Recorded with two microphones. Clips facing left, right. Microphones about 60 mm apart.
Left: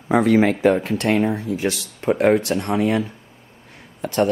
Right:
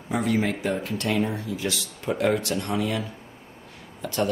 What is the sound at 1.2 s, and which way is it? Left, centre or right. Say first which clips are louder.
Speech: left 6 dB; left.